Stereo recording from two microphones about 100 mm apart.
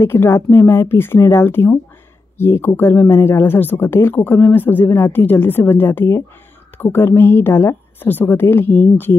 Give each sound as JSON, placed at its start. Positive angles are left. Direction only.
{"t": 0.0, "sound": "speech", "side_deg": 25}